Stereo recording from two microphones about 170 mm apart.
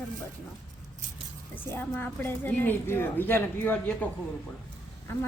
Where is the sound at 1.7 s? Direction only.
10° left (ahead or behind).